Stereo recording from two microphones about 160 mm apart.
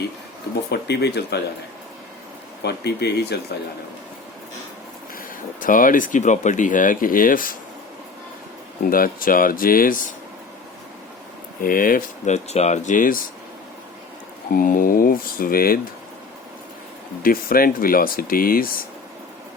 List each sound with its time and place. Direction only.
0.7 s speech: 90° left
2.6 s speech: 90° left
5.1 s speech: 55° left (ahead or behind)
8.9 s speech: 60° left (ahead or behind)
11.6 s speech: 60° left (ahead or behind)
14.5 s speech: 60° left (ahead or behind)
17.2 s speech: 65° left (ahead or behind)